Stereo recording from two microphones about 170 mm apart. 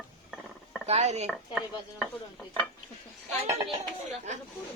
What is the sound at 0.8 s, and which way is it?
Speech, 40° right (ahead or behind).